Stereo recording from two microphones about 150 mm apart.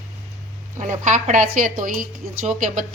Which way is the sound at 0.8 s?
55° right (ahead or behind).